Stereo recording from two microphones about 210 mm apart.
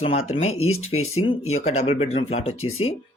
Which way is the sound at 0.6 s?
80° left.